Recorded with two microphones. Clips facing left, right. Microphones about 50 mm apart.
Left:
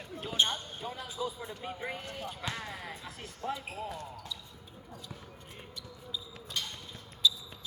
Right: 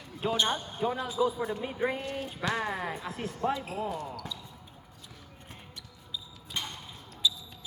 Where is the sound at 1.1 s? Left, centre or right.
Right.